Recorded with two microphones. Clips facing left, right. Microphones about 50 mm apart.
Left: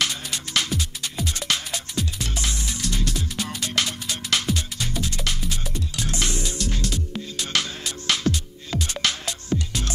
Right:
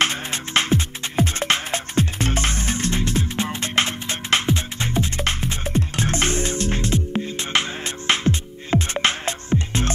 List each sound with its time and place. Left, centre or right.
0.0 s music: right